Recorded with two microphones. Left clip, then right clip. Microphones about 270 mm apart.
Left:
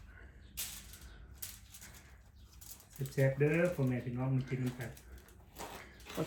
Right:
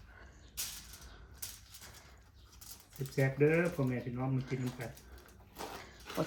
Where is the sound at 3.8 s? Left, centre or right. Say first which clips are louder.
Right 1 dB; centre.